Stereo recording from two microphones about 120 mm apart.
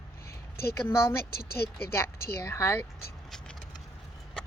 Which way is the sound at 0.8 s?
20° left (ahead or behind).